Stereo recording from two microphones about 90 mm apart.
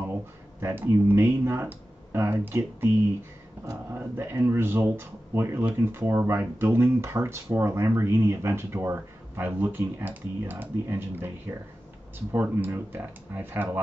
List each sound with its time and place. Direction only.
0.1 s speech: 25° right (ahead or behind)
3.6 s a sound: 20° right (ahead or behind)
3.9 s speech: 25° right (ahead or behind)